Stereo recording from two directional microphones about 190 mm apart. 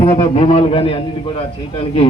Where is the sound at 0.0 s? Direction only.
25° left (ahead or behind).